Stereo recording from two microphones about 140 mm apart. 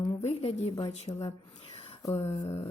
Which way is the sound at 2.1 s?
45° left (ahead or behind).